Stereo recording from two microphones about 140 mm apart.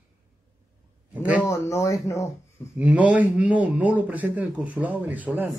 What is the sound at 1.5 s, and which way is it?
Speech, 20° left (ahead or behind).